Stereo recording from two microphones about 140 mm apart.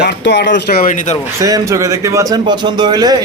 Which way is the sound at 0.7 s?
75° left (ahead or behind).